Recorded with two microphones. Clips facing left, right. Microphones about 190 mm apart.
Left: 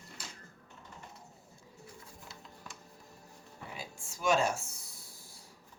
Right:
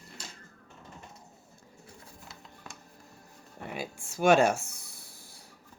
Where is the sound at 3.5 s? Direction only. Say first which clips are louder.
Right 8 dB; 65° right (ahead or behind).